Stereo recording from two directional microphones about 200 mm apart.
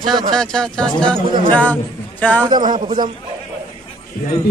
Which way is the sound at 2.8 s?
20° right (ahead or behind).